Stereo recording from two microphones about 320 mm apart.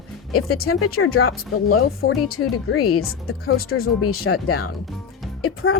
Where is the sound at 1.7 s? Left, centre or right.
Left.